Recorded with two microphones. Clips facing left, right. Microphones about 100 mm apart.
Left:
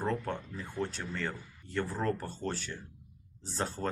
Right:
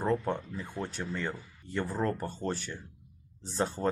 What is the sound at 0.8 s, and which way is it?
Speech, 5° right (ahead or behind).